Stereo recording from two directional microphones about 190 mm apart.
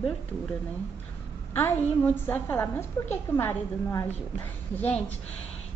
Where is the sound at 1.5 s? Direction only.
10° left (ahead or behind).